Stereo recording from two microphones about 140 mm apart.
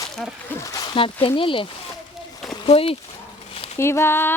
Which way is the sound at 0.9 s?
40° left (ahead or behind).